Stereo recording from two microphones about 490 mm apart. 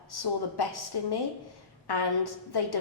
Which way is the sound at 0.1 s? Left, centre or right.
Left.